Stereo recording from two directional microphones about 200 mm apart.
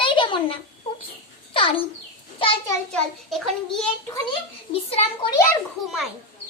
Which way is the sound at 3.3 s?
Centre (ahead or behind).